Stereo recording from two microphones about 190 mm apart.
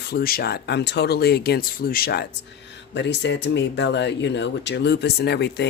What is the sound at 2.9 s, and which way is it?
Speech, 65° left (ahead or behind).